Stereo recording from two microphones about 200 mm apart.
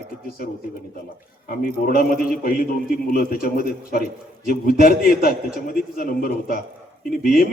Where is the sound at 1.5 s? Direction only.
45° left (ahead or behind).